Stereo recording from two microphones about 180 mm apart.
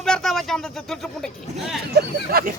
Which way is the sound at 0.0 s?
Centre (ahead or behind).